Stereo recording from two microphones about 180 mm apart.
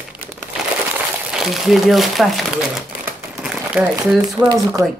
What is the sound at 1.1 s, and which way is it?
Speech, 5° right (ahead or behind).